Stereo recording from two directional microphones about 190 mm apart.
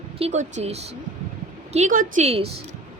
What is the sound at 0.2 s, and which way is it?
Speech, 35° right (ahead or behind).